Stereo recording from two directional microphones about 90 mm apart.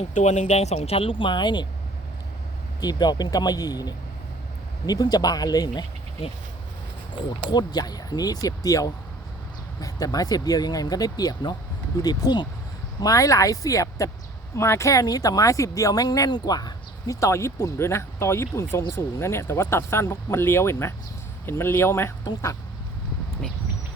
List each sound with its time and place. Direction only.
0.9 s speech: 90° left; by 1.6 s 55° left (ahead or behind)
2.8 s speech: 50° left (ahead or behind)
7.2 s speech: 55° left (ahead or behind); by 22.1 s 30° left (ahead or behind)